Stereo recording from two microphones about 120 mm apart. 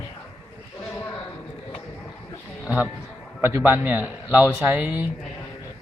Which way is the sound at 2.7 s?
10° right (ahead or behind).